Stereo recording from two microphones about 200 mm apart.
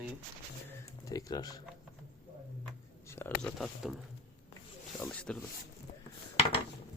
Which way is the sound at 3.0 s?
10° left (ahead or behind).